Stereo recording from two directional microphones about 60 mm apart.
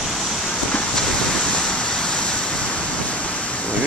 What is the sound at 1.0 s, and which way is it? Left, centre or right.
Waves, centre.